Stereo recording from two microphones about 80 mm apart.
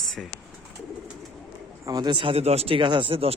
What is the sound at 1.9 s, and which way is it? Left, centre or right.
Speech, right.